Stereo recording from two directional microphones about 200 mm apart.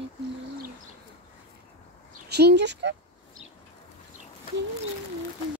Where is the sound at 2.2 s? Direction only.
55° right (ahead or behind).